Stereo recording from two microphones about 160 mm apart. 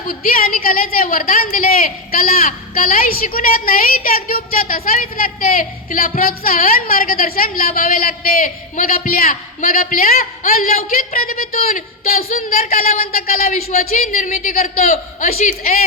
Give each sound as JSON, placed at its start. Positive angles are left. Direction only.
{"t": 0.1, "sound": "a woman's voice", "side_deg": 60}
{"t": 12.3, "sound": "a woman's voice", "side_deg": 50}
{"t": 12.7, "sound": "a man's voice", "side_deg": 45}